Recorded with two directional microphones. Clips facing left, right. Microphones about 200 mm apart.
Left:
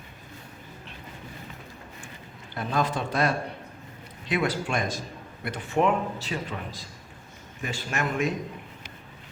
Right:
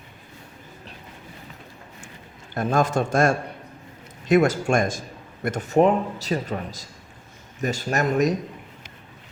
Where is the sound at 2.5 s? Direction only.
45° right (ahead or behind).